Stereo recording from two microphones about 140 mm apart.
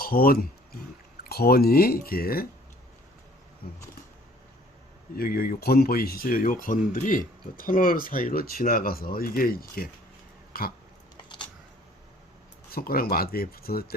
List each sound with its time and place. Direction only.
0.0 s speech: 90° left
5.1 s speech: 90° left
10.5 s dog: 90° left
12.7 s speech: 90° left